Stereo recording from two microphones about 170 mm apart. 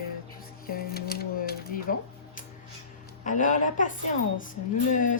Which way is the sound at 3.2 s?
50° left (ahead or behind).